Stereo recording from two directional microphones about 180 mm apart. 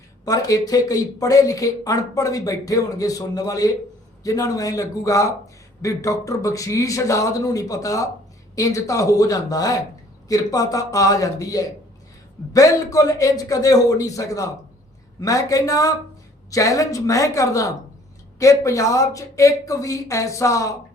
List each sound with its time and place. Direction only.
0.3 s speech: 20° left (ahead or behind)